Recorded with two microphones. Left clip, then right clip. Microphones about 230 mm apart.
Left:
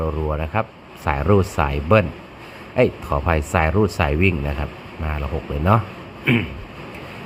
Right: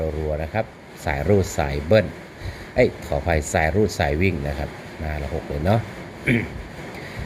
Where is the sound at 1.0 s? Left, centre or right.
Centre.